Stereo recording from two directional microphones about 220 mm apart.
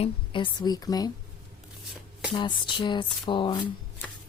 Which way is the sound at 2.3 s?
20° left (ahead or behind).